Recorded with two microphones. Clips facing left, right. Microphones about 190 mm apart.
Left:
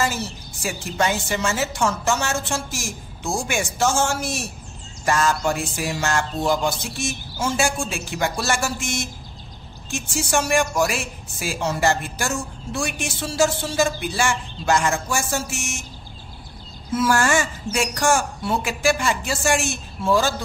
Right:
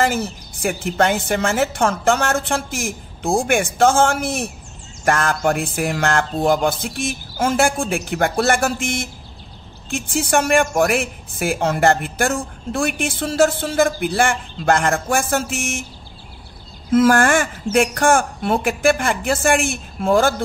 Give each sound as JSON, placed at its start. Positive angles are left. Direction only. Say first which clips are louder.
{"t": 0.0, "sound": "a woman's voice", "louder": "right 5 dB", "side_deg": -55}
{"t": 16.9, "sound": "a woman's voice", "louder": "right 6 dB", "side_deg": -55}